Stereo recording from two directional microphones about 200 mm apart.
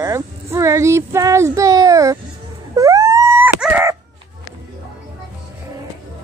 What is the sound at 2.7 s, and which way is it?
Wail, 15° right (ahead or behind).